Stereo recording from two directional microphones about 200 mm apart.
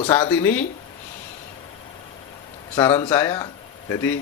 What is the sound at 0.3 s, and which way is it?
Speech, 10° left (ahead or behind).